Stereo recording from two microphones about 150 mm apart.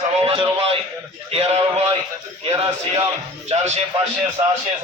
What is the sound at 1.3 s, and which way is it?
Speech, 40° right (ahead or behind).